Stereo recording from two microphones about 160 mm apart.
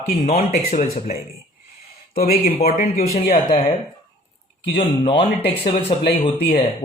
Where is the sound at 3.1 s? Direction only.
45° left (ahead or behind).